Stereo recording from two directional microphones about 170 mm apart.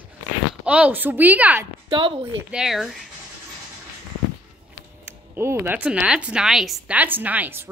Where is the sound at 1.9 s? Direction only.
30° right (ahead or behind).